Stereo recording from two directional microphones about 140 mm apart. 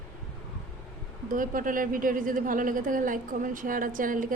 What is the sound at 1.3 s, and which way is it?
Speech, 80° right.